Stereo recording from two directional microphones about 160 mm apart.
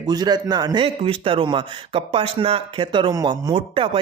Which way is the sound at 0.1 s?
25° right (ahead or behind).